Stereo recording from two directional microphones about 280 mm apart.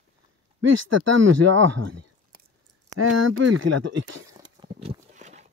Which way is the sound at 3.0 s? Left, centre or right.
Right.